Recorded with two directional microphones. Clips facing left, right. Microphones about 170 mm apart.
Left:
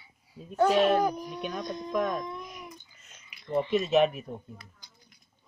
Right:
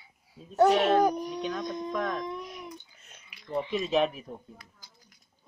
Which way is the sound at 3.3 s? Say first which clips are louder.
Right 1 dB; centre (ahead or behind).